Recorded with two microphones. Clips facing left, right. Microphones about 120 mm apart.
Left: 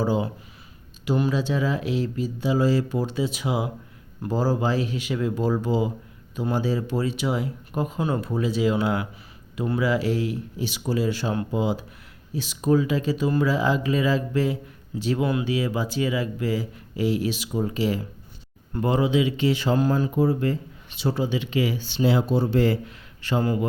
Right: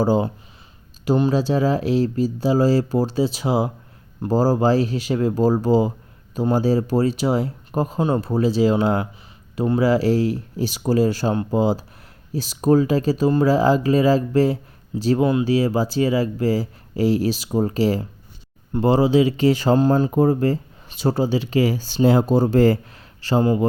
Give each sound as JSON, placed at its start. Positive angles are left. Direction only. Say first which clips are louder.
{"t": 0.0, "sound": "speech", "louder": "right 5 dB", "side_deg": -35}
{"t": 23.2, "sound": "a man's voice", "louder": "right 5 dB", "side_deg": -30}